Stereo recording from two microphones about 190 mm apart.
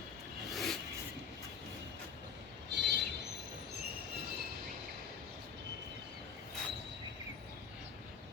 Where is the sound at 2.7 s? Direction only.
65° right (ahead or behind).